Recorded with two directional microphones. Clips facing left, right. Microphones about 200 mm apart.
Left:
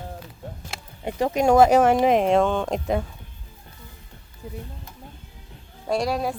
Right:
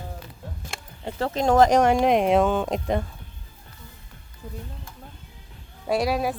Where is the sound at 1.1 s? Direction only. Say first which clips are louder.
Left 3 dB; 15° left (ahead or behind).